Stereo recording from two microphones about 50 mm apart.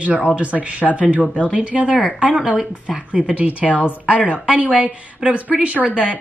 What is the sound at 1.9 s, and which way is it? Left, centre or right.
Speech, centre.